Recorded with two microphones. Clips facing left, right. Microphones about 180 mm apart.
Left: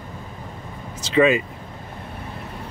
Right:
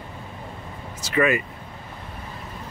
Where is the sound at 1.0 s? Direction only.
20° left (ahead or behind).